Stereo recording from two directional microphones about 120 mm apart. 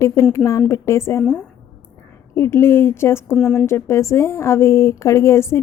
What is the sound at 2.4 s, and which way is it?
Speech, 20° left (ahead or behind).